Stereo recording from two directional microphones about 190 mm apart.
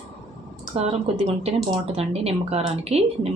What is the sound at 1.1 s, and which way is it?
Speech, 35° right (ahead or behind).